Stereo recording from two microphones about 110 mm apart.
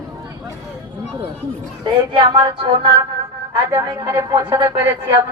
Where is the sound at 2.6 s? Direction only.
55° right (ahead or behind).